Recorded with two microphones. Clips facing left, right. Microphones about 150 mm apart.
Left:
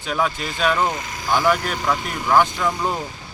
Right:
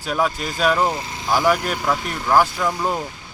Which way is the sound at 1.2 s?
10° right (ahead or behind).